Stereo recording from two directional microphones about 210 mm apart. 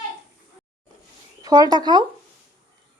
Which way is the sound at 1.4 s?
20° right (ahead or behind).